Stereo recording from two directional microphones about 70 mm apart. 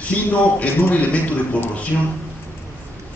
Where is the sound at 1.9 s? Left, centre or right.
Centre.